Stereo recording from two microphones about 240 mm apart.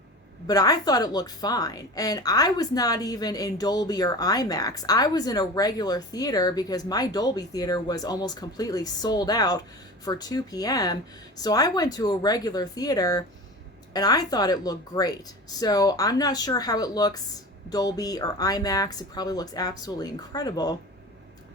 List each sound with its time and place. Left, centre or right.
0.4 s a woman's voice: centre